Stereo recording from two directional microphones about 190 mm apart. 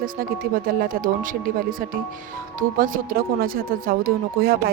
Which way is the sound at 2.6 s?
45° right (ahead or behind).